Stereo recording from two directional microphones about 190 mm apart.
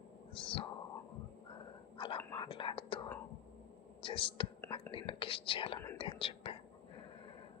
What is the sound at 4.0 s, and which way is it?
Whispering, 25° left (ahead or behind).